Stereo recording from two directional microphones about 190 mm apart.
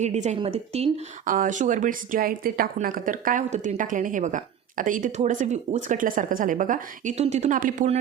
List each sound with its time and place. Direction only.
0.0 s a woman's voice: 40° right (ahead or behind)